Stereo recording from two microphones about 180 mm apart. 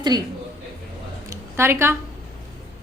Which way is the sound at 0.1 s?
20° right (ahead or behind).